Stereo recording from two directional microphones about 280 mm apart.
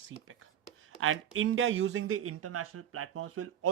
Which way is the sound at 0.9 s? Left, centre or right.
Right.